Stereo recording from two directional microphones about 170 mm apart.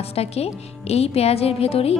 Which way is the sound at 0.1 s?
35° left (ahead or behind).